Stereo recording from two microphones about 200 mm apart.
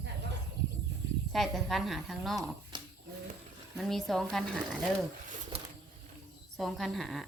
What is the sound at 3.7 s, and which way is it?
A woman's voice, centre (ahead or behind).